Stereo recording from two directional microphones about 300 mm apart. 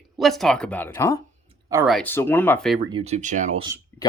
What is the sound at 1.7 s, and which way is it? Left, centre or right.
Speech, centre.